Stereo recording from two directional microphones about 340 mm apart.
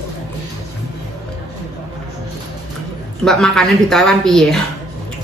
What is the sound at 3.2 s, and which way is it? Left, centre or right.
Speech, centre.